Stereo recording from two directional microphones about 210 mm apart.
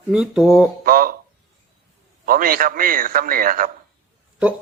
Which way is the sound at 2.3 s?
40° right (ahead or behind).